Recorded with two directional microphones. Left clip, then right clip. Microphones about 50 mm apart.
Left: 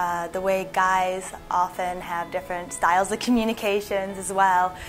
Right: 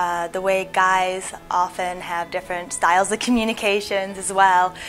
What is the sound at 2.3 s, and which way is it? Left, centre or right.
Speech, right.